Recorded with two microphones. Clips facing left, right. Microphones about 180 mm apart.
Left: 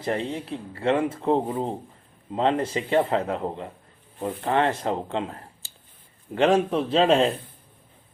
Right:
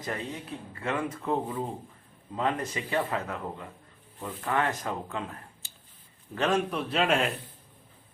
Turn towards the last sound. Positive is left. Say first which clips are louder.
# left 7 dB
turn(degrees=30)  # may be behind; listen again after turning